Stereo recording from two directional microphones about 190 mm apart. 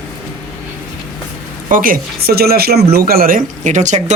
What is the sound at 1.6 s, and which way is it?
Speech, 45° right (ahead or behind).